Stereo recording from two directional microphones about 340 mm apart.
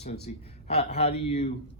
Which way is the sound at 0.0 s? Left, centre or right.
Centre.